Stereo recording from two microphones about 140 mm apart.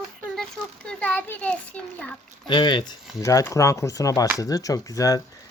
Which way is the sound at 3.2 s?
25° left (ahead or behind).